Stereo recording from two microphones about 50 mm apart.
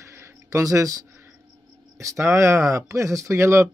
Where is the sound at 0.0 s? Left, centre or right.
Right.